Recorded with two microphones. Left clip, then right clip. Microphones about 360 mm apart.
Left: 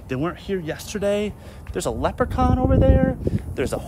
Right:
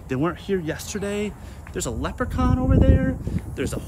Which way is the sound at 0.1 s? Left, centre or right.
Centre.